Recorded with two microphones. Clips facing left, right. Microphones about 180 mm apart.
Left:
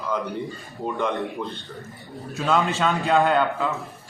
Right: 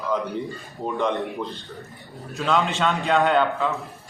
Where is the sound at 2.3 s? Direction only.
Centre (ahead or behind).